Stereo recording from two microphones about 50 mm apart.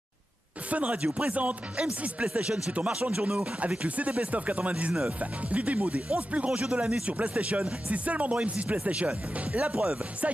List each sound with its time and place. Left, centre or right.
0.7 s speech: right